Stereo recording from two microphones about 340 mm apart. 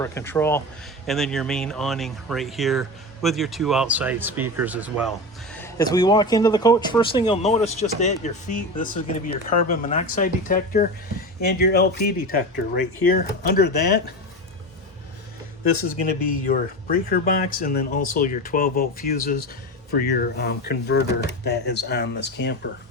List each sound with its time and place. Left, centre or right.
0.0 s a man's voice: centre; by 12.6 s left
12.7 s speech: left
13.5 s speech: left
16.3 s speech: left